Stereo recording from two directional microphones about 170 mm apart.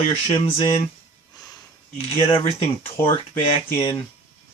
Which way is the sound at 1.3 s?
20° left (ahead or behind).